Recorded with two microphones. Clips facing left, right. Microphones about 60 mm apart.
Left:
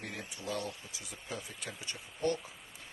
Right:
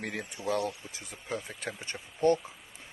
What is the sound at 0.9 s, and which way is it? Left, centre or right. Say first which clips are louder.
Speech: right 6 dB; right.